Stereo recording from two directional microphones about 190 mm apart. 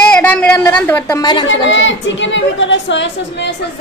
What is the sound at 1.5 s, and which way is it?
A woman's voice, 75° left (ahead or behind).